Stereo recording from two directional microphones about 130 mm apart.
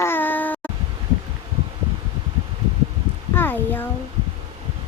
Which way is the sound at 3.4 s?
15° left (ahead or behind).